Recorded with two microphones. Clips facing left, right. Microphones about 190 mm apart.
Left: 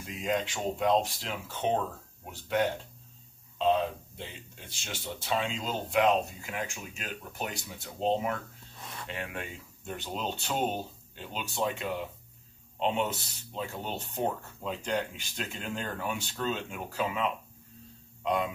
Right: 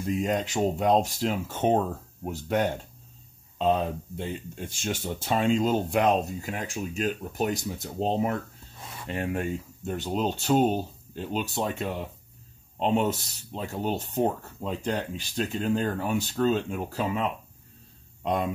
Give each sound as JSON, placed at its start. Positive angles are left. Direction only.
{"t": 0.2, "sound": "speech", "side_deg": -45}